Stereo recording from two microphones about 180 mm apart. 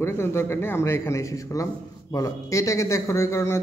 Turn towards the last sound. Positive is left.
turn(degrees=15)  # may be behind; listen again after turning